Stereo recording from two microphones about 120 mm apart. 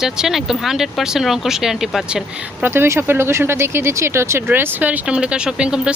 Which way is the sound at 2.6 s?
20° right (ahead or behind).